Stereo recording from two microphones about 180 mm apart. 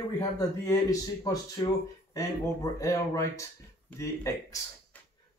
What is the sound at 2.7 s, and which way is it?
Speech, 15° left (ahead or behind).